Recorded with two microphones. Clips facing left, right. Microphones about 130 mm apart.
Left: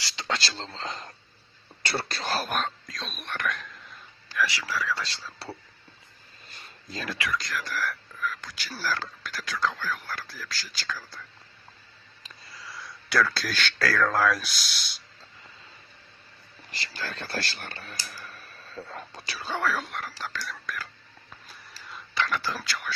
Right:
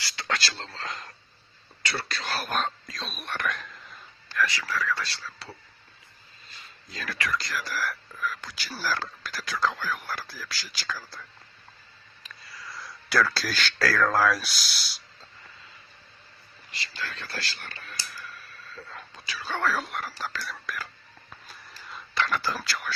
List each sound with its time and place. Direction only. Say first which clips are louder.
0.0 s speech: even; 20° left (ahead or behind)
2.6 s whispering: right 1 dB; centre (ahead or behind)
4.4 s speech: right 1 dB; 15° left (ahead or behind)
6.9 s speech: left 2 dB; 25° left (ahead or behind)
7.3 s speech: right 2 dB; centre (ahead or behind)
12.6 s speech: right 1 dB; centre (ahead or behind)
17.0 s speech: left 3 dB; 40° left (ahead or behind)
18.7 s whispering: left 5 dB; 25° left (ahead or behind)
18.9 s whispering: left 1 dB; 40° left (ahead or behind)
19.6 s speech: right 2 dB; centre (ahead or behind)
21.2 s whispering: right 1 dB; centre (ahead or behind)